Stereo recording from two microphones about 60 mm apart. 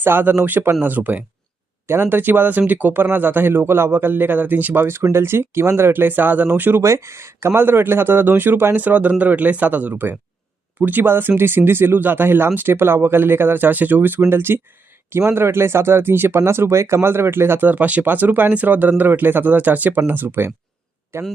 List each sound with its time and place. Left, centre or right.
0.0 s speech: right
1.9 s speech: right
6.8 s speech: right
16.4 s speech: right
17.7 s speech: right